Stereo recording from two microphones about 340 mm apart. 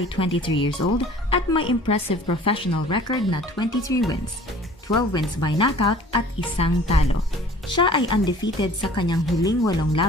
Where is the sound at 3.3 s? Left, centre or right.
Centre.